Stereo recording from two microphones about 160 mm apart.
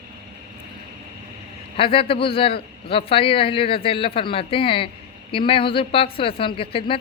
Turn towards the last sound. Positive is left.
turn(degrees=35)  # may be behind; listen again after turning